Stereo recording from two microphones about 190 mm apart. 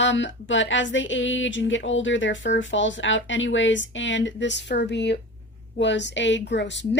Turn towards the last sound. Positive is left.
turn(degrees=70)  # may be behind; listen again after turning